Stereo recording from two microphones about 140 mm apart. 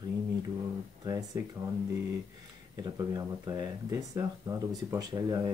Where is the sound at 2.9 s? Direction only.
25° right (ahead or behind).